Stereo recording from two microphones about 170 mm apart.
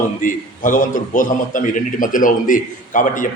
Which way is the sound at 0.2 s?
50° left (ahead or behind).